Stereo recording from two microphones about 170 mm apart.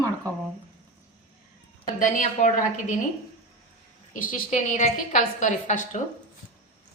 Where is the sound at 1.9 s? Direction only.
50° left (ahead or behind).